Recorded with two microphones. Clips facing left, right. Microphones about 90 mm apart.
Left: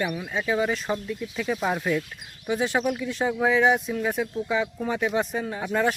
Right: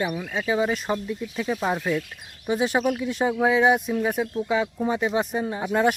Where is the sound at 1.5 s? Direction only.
Centre (ahead or behind).